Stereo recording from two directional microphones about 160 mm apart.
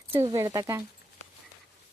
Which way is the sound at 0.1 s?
35° right (ahead or behind).